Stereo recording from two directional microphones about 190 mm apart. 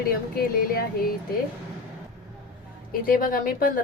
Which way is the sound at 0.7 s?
50° left (ahead or behind).